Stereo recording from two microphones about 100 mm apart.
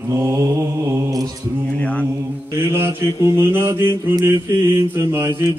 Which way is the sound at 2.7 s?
25° right (ahead or behind).